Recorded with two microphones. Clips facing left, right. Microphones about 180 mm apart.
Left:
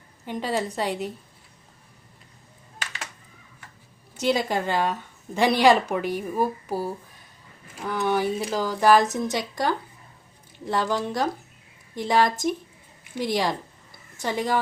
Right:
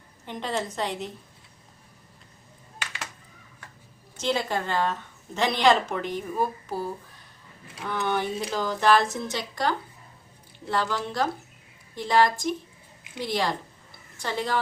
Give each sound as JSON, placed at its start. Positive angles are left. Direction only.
{"t": 0.3, "sound": "a woman's voice", "side_deg": 5}
{"t": 4.2, "sound": "a woman's voice", "side_deg": 15}
{"t": 7.9, "sound": "a woman's voice", "side_deg": 5}